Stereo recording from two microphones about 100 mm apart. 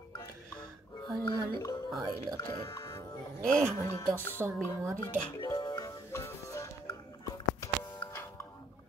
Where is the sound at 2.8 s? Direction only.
35° left (ahead or behind).